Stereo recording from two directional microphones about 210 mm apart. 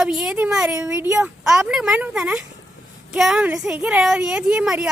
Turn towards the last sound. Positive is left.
turn(degrees=-5)  # may be behind; listen again after turning